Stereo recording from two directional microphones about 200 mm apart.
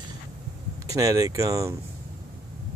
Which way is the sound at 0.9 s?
15° right (ahead or behind).